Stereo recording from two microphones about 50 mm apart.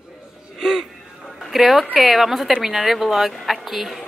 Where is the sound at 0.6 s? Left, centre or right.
Centre.